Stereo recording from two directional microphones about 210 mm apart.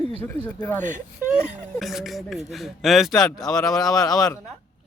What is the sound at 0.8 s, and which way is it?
Speech, 35° right (ahead or behind).